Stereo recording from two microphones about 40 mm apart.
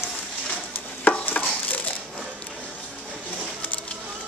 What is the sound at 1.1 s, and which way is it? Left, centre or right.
Chopping, left.